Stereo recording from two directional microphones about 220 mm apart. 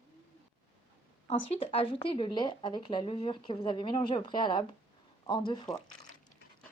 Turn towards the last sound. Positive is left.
turn(degrees=20)  # may be behind; listen again after turning